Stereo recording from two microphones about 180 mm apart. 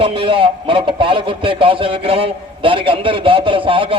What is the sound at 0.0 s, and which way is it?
A man's voice, 30° right (ahead or behind).